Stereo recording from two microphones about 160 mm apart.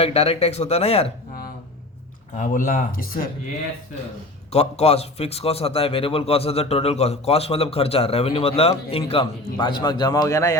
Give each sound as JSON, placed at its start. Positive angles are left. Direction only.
{"t": 0.0, "sound": "a man's voice", "side_deg": 40}
{"t": 2.3, "sound": "speech", "side_deg": 55}
{"t": 4.5, "sound": "a man's voice", "side_deg": 40}